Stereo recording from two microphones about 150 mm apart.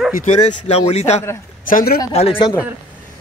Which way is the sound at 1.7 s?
65° left (ahead or behind).